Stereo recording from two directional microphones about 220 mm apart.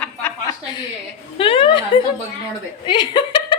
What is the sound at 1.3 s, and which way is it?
Speech, 25° left (ahead or behind).